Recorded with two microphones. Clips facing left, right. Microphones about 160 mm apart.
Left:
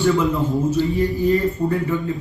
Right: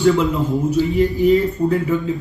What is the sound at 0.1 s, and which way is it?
A man's voice, 20° right (ahead or behind).